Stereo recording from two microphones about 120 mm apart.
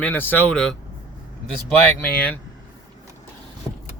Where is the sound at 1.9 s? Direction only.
15° left (ahead or behind).